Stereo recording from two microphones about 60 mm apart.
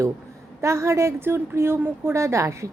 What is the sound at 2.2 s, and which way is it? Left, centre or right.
Speech, right.